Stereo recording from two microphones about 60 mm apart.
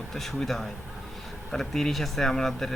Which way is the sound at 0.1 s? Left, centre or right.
Centre.